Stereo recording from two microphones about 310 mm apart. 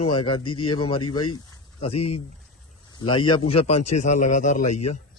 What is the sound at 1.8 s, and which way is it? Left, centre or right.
A man's voice, centre.